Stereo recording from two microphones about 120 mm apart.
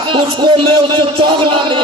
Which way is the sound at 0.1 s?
40° right (ahead or behind).